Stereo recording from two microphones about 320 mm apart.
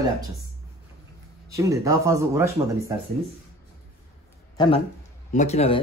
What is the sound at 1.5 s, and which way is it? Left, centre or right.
Speech, centre.